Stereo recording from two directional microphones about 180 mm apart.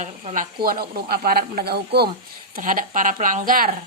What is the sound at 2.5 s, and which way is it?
A woman's voice, 50° right (ahead or behind).